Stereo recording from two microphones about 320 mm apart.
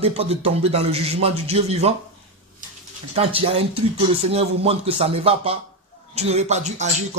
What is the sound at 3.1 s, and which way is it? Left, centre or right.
Speech, centre.